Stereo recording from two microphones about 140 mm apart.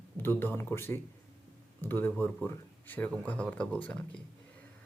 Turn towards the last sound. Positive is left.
turn(degrees=10)  # may be behind; listen again after turning